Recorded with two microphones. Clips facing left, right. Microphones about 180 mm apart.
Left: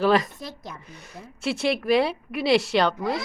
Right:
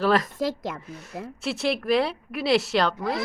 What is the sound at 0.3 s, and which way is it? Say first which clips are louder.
Speech: right 10 dB; 90° right.